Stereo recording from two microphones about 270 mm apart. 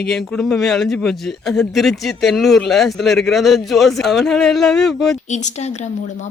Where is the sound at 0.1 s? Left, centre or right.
Centre.